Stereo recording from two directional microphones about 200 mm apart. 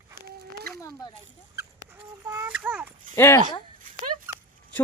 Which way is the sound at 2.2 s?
10° right (ahead or behind).